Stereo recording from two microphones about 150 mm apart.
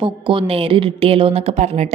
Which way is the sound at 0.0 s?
35° right (ahead or behind).